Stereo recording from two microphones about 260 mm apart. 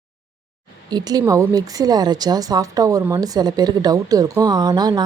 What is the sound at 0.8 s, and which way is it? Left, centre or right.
Speech, centre.